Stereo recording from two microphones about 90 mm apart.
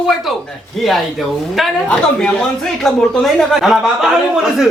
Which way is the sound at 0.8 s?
Centre (ahead or behind).